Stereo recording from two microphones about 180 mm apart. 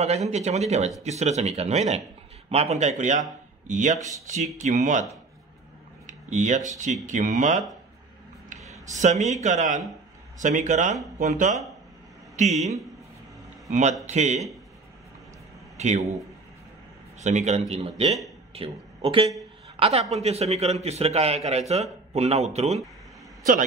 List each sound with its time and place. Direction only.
0.3 s a man's voice: 40° right (ahead or behind)
6.0 s speech: 45° right (ahead or behind)
8.9 s a man's voice: 40° right (ahead or behind)
15.8 s a man's voice: 40° right (ahead or behind)
17.2 s a man's voice: 40° right (ahead or behind)